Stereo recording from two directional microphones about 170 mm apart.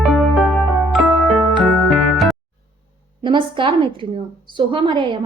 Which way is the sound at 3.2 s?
30° right (ahead or behind).